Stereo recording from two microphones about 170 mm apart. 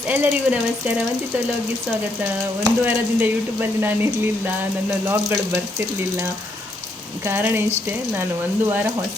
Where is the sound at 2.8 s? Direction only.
10° right (ahead or behind).